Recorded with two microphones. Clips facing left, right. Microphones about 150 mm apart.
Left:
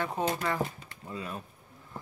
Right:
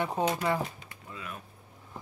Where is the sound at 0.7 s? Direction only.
35° left (ahead or behind).